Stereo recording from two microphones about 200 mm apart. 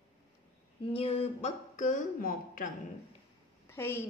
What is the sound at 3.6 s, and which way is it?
Speech, 10° left (ahead or behind).